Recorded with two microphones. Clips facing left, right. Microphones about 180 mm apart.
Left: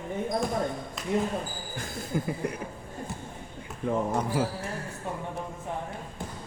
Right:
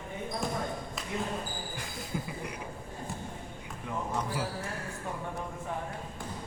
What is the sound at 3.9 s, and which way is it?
Speech, 45° left (ahead or behind).